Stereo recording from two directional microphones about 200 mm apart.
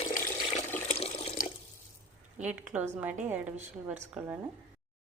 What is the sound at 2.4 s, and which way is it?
Speech, 10° right (ahead or behind).